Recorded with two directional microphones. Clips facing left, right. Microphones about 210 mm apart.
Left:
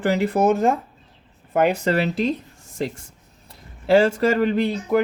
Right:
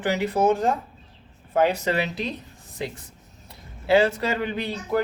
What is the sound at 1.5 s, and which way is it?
Speech, 55° left (ahead or behind).